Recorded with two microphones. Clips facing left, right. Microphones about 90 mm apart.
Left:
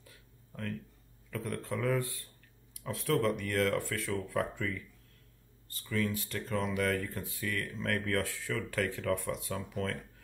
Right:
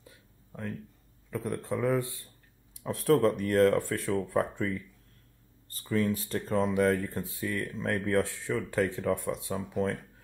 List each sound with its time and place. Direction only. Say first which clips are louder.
0.0 s a sound: right 3 dB; 20° right (ahead or behind)
1.3 s speech: right 4 dB; 20° right (ahead or behind)
3.0 s speech: right 6 dB; 40° right (ahead or behind); by 9.9 s 25° right (ahead or behind)